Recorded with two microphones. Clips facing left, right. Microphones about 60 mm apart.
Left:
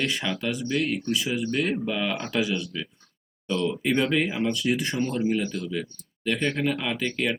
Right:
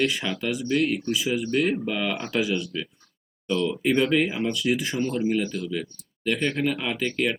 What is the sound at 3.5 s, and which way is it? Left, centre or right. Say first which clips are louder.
Speech: right 2 dB; centre.